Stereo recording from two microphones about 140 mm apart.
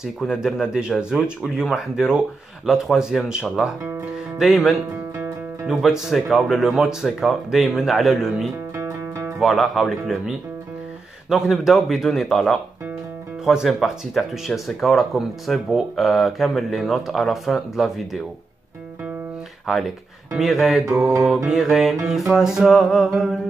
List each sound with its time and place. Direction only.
0.0 s speech: centre (ahead or behind)
8.7 s music: 20° right (ahead or behind)
9.4 s speech: centre (ahead or behind)
19.6 s speech: centre (ahead or behind)